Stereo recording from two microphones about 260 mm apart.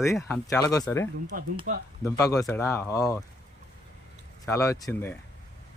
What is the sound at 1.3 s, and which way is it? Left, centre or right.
Speech, right.